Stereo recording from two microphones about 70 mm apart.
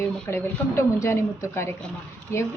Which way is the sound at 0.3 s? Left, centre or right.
Left.